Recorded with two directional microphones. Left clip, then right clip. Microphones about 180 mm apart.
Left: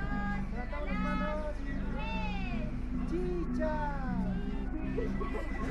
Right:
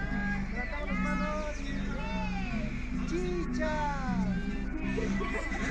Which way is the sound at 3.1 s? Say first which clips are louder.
Right 2 dB; 45° right (ahead or behind).